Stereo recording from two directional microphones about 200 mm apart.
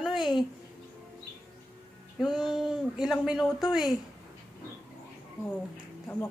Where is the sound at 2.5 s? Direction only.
Centre (ahead or behind).